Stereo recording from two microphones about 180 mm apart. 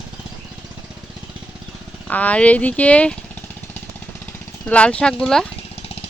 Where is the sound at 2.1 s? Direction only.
10° left (ahead or behind).